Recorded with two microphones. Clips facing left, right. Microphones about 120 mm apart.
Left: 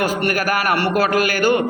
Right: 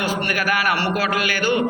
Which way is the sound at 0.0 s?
45° left (ahead or behind).